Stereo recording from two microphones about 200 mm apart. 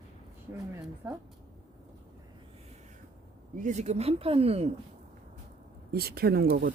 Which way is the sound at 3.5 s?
40° right (ahead or behind).